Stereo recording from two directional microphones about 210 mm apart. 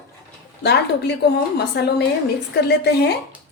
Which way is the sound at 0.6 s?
55° left (ahead or behind).